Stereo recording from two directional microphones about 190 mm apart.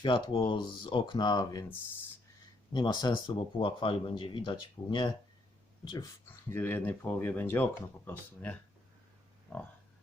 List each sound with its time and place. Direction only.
0.0 s speech: 25° left (ahead or behind)
2.7 s speech: 25° left (ahead or behind)
6.5 s speech: 10° left (ahead or behind)